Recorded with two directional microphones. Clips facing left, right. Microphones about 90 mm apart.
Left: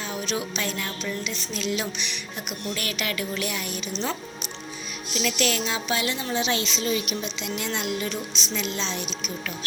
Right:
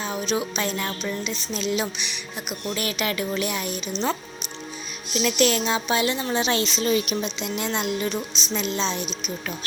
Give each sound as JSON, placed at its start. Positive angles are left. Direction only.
{"t": 0.0, "sound": "music", "side_deg": -25}
{"t": 5.2, "sound": "a woman's voice", "side_deg": -30}
{"t": 7.3, "sound": "music", "side_deg": -30}